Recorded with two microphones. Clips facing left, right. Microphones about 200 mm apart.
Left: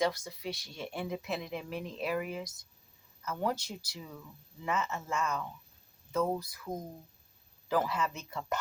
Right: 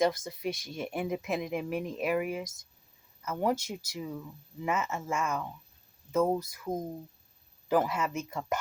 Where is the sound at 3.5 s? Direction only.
45° right (ahead or behind).